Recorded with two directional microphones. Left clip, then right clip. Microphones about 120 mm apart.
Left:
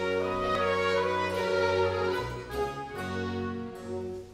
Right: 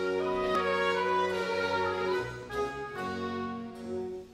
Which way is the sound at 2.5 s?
30° left (ahead or behind).